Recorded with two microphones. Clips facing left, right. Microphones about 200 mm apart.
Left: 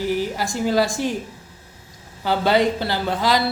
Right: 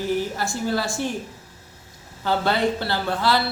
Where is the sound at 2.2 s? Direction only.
15° left (ahead or behind).